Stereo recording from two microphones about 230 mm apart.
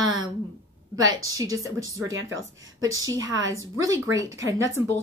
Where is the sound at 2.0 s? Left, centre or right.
Right.